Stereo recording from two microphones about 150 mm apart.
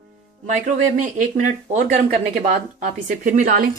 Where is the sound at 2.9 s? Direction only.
55° right (ahead or behind).